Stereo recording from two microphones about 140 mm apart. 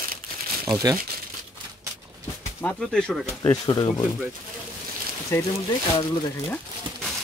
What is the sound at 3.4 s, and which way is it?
Speech, 30° left (ahead or behind).